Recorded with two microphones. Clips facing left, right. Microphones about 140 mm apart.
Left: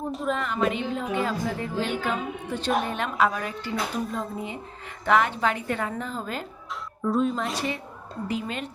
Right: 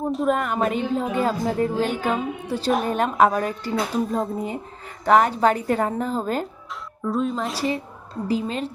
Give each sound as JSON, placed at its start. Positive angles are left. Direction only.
{"t": 0.3, "sound": "a woman's voice", "side_deg": -50}
{"t": 7.0, "sound": "a woman's voice", "side_deg": 0}
{"t": 8.3, "sound": "a woman's voice", "side_deg": -35}